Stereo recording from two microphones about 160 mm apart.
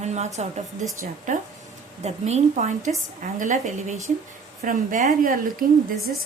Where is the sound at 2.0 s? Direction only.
45° right (ahead or behind).